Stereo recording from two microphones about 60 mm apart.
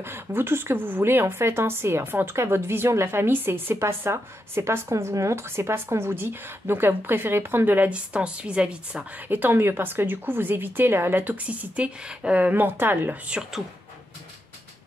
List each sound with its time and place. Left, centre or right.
0.0 s a woman's voice: right
4.8 s speech: right
7.9 s a woman's voice: centre
9.3 s speech: right